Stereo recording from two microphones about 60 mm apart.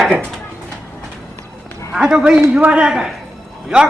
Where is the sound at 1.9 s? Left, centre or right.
Centre.